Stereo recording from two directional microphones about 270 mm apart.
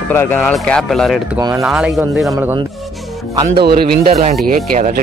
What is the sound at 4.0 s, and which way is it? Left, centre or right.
A man's voice, right.